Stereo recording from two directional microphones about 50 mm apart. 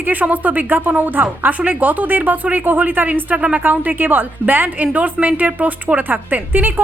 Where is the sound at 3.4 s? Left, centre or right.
Right.